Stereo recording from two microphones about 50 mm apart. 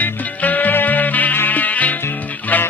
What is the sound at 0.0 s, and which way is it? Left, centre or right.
Music, left.